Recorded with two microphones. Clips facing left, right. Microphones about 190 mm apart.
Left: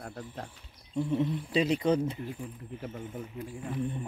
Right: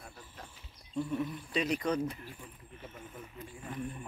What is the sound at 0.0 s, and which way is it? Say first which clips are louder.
Speech: left 10 dB; 65° left (ahead or behind).